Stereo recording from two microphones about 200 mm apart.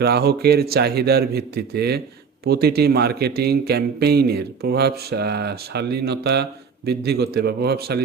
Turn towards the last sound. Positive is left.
turn(degrees=-50)  # may be behind; listen again after turning